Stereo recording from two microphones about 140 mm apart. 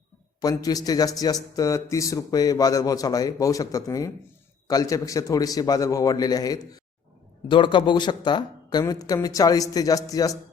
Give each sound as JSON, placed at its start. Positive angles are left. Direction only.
{"t": 0.4, "sound": "a man's voice", "side_deg": 25}